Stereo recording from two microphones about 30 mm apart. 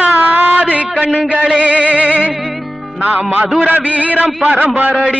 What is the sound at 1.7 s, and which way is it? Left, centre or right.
Speech, right.